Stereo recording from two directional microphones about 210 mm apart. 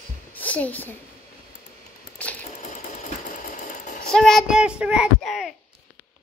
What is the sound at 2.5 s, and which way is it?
Sewing machine, 35° left (ahead or behind).